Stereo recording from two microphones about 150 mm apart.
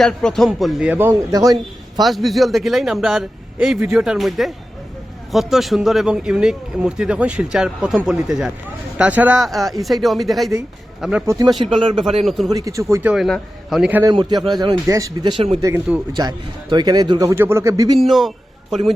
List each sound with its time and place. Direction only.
0.0 s a man's voice: 5° left (ahead or behind)
1.3 s a man's voice: 25° right (ahead or behind)
2.0 s a man's voice: centre (ahead or behind)
9.4 s a man's voice: centre (ahead or behind)
11.3 s a man's voice: 25° right (ahead or behind)
11.6 s speech: 35° right (ahead or behind)
12.2 s a man's voice: centre (ahead or behind)
12.5 s a man's voice: 25° right (ahead or behind)
13.1 s a man's voice: centre (ahead or behind)
14.0 s a man's voice: 30° right (ahead or behind)
18.0 s a sound: centre (ahead or behind)